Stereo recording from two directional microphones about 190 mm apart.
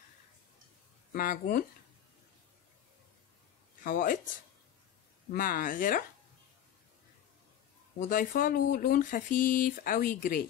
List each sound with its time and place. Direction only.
1.1 s speech: 45° left (ahead or behind)
3.8 s speech: 45° left (ahead or behind)
8.0 s speech: 45° left (ahead or behind)